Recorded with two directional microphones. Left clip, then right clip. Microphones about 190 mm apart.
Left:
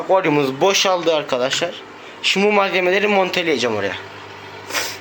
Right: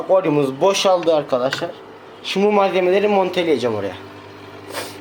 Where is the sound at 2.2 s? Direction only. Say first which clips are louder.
Left 1 dB; 5° right (ahead or behind).